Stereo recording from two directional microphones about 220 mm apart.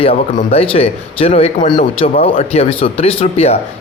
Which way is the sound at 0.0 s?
25° left (ahead or behind).